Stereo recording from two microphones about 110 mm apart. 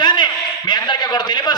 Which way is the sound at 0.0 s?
40° left (ahead or behind).